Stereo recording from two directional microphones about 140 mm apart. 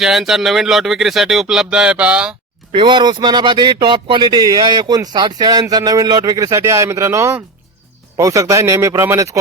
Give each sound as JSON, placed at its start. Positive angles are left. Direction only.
{"t": 0.0, "sound": "speech", "side_deg": 0}
{"t": 2.7, "sound": "speech", "side_deg": -35}